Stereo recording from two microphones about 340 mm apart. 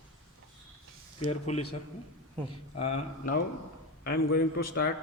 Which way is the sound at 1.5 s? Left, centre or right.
Centre.